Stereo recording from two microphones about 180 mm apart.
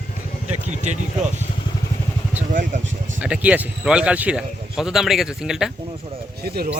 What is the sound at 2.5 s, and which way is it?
Speech, 45° right (ahead or behind).